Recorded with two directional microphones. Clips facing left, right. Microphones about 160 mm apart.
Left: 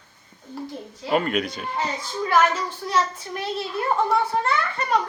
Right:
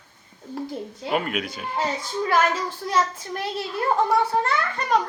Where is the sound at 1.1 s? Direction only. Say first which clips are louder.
Left 3 dB; 5° right (ahead or behind).